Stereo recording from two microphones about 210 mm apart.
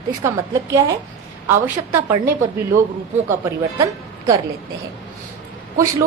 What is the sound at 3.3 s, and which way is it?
A woman's voice, 15° right (ahead or behind).